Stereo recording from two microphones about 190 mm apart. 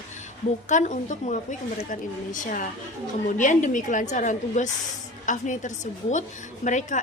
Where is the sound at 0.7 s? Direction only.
40° left (ahead or behind).